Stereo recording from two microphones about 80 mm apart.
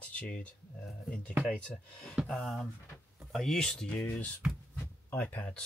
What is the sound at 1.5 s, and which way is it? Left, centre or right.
Speech, centre.